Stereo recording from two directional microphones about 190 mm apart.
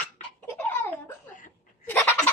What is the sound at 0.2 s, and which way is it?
Laughter, 40° left (ahead or behind).